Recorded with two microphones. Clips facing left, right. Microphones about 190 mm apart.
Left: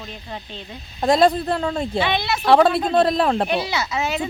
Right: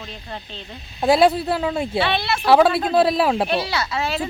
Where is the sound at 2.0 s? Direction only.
15° left (ahead or behind).